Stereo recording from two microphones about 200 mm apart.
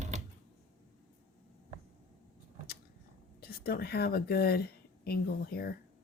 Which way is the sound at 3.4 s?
50° left (ahead or behind).